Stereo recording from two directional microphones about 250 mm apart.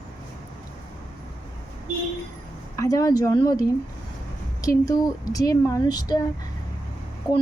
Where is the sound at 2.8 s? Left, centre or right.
Centre.